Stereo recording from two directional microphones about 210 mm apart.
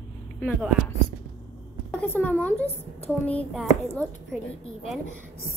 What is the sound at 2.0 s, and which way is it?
A woman's voice, 10° left (ahead or behind).